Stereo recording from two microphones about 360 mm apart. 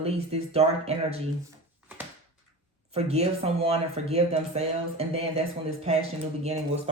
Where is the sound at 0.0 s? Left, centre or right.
Centre.